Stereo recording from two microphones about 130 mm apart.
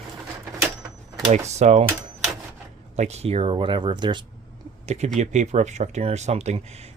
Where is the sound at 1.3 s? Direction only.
60° right (ahead or behind).